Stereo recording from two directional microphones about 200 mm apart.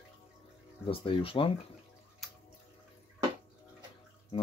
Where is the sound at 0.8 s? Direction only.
25° left (ahead or behind).